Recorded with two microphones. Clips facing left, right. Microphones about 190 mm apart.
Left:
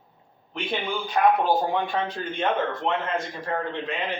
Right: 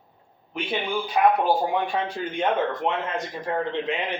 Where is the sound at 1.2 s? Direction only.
10° right (ahead or behind).